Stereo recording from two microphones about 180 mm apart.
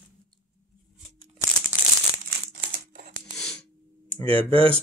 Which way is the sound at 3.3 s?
5° left (ahead or behind).